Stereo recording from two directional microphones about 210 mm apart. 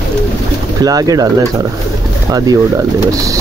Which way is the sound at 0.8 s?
15° right (ahead or behind).